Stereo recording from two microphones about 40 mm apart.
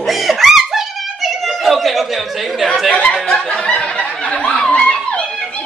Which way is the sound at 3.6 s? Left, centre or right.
Left.